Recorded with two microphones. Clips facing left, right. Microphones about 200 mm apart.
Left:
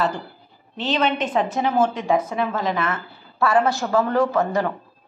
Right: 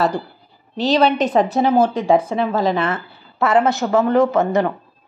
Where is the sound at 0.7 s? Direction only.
35° right (ahead or behind); by 4.6 s 20° right (ahead or behind).